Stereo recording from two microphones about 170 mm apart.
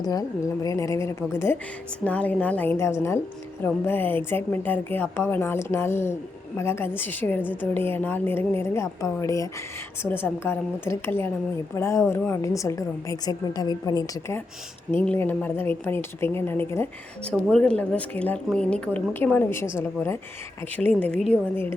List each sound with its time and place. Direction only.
0.0 s a woman's voice: 20° left (ahead or behind)